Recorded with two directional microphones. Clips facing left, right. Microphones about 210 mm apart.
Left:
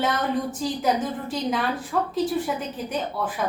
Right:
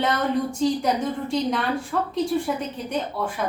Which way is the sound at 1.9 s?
5° left (ahead or behind).